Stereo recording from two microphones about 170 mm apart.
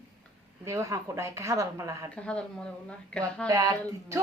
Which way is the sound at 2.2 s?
5° left (ahead or behind).